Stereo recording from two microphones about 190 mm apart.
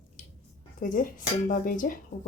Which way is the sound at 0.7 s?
45° left (ahead or behind).